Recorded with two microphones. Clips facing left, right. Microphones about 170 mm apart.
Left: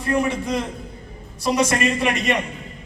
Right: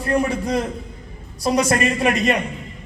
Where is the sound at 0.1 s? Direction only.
35° right (ahead or behind).